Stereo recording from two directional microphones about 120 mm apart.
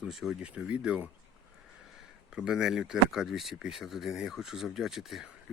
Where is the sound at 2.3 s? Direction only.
5° right (ahead or behind).